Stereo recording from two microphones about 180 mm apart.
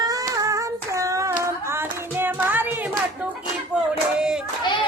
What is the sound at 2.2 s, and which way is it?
Music, 10° right (ahead or behind).